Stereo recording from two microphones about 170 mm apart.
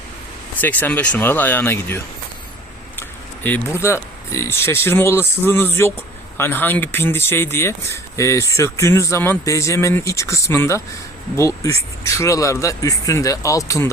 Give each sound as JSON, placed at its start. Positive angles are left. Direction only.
{"t": 0.6, "sound": "speech", "side_deg": 10}
{"t": 3.4, "sound": "speech", "side_deg": 15}